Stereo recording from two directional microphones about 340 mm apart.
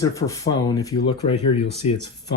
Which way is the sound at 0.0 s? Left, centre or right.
Centre.